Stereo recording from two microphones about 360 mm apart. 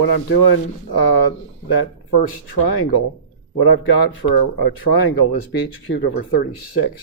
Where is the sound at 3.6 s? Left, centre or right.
Left.